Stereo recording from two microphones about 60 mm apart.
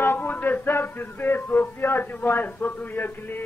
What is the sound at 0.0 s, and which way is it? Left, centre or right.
Speech, left.